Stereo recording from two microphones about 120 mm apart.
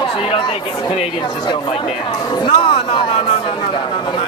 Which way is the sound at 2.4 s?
45° left (ahead or behind).